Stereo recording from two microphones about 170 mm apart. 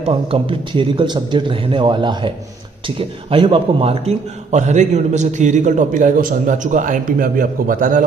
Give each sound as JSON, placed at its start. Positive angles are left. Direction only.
{"t": 0.0, "sound": "a man's voice", "side_deg": -30}